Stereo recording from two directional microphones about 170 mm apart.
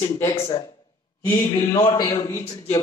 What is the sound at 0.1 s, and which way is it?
A man's voice, 20° left (ahead or behind).